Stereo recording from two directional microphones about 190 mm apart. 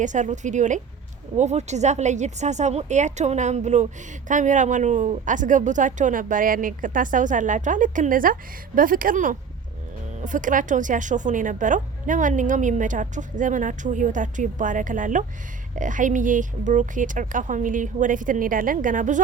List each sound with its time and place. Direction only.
0.0 s a woman's voice: 40° right (ahead or behind)